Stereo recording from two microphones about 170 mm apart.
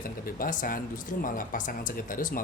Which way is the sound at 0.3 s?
55° left (ahead or behind).